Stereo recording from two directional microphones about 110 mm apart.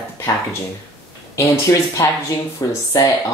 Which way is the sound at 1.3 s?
30° left (ahead or behind).